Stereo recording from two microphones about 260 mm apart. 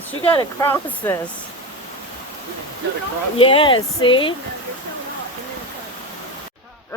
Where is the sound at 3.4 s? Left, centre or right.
Left.